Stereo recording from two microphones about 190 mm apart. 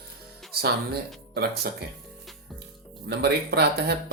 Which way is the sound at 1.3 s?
55° right (ahead or behind).